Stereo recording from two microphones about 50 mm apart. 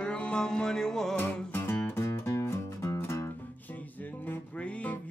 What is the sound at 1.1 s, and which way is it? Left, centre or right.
Music, left.